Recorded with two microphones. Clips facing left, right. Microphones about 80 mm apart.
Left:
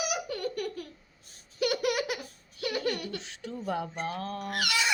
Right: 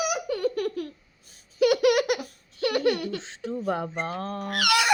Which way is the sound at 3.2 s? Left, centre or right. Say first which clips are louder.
Right 7 dB; right.